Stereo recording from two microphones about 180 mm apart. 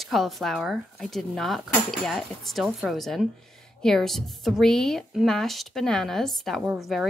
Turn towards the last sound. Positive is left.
turn(degrees=0)  # may be behind; listen again after turning